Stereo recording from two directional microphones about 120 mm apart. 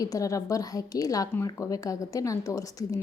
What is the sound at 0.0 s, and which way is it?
Speech, 30° left (ahead or behind).